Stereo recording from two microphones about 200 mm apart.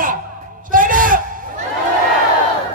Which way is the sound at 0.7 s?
40° right (ahead or behind).